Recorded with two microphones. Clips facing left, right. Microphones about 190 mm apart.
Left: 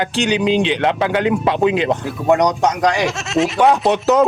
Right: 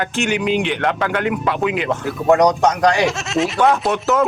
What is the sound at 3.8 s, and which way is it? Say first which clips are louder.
Speech: left 3 dB; 20° left (ahead or behind).